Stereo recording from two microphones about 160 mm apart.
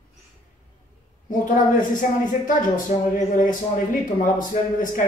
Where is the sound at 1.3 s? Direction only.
55° left (ahead or behind).